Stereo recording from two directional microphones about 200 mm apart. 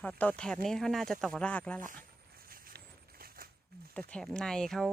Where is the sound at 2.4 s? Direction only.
45° right (ahead or behind).